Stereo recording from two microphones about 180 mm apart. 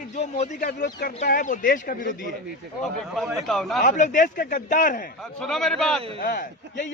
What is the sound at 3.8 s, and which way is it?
A man's voice, 45° left (ahead or behind).